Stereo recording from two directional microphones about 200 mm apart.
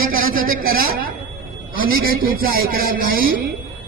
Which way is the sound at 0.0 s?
45° right (ahead or behind).